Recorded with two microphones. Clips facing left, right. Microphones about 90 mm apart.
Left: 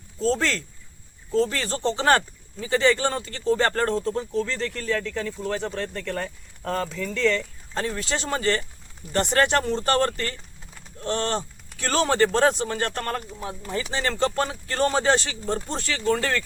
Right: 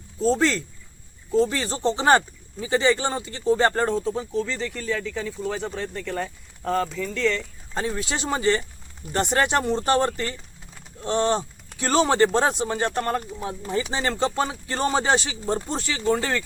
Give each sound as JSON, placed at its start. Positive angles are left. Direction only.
{"t": 0.2, "sound": "speech", "side_deg": -15}
{"t": 3.9, "sound": "speech", "side_deg": -5}